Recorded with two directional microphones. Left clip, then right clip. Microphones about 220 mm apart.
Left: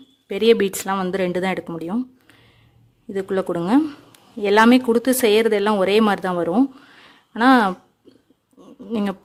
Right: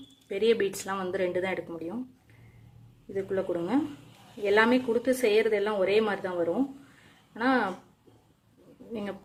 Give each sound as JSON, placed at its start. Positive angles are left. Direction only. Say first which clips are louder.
{"t": 0.3, "sound": "speech", "louder": "left 9 dB", "side_deg": 45}
{"t": 3.1, "sound": "speech", "louder": "left 7 dB", "side_deg": 45}
{"t": 8.9, "sound": "speech", "louder": "left 11 dB", "side_deg": 50}